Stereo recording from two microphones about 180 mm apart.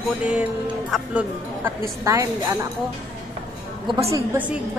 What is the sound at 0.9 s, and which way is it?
A woman's voice, 10° right (ahead or behind).